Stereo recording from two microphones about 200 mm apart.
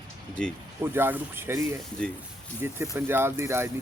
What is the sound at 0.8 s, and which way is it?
Speech, 10° right (ahead or behind).